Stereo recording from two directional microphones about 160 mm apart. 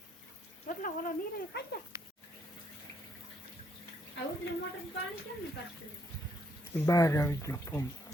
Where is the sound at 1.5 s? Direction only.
90° left.